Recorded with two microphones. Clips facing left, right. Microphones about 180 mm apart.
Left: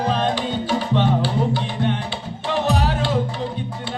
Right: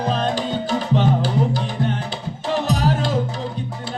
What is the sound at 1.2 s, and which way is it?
Music, 40° right (ahead or behind).